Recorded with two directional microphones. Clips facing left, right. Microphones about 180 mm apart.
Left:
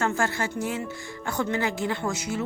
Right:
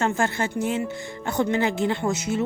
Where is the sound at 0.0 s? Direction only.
20° right (ahead or behind).